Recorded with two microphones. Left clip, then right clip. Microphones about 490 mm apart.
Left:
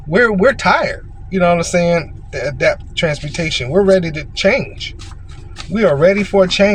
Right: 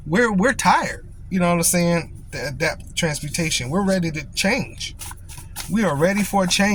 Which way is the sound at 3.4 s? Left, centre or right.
Right.